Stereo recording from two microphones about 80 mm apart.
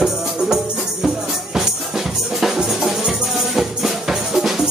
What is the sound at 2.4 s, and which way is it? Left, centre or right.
Music, centre.